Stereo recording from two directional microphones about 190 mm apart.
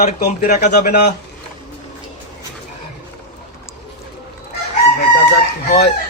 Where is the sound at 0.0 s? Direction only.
55° left (ahead or behind).